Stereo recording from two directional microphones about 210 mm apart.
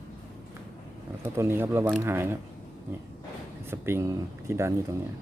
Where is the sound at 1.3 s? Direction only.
10° right (ahead or behind).